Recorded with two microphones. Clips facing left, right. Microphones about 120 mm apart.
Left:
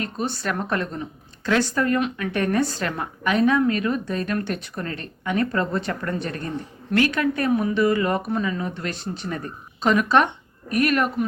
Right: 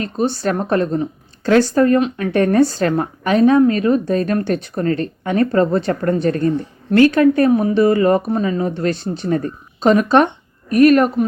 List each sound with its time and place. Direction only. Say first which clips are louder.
0.0 s a woman's voice: right 8 dB; 35° right (ahead or behind)